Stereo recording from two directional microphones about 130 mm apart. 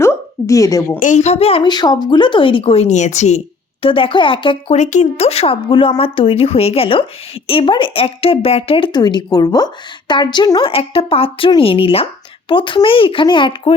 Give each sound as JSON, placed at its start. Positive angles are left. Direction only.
{"t": 0.0, "sound": "a sound", "side_deg": 20}
{"t": 0.9, "sound": "a woman's voice", "side_deg": 85}
{"t": 1.2, "sound": "speech", "side_deg": 55}
{"t": 1.7, "sound": "speech", "side_deg": 35}
{"t": 2.8, "sound": "a woman's voice", "side_deg": 65}
{"t": 3.8, "sound": "speech", "side_deg": 45}
{"t": 4.7, "sound": "speech", "side_deg": 70}
{"t": 10.7, "sound": "speech", "side_deg": 45}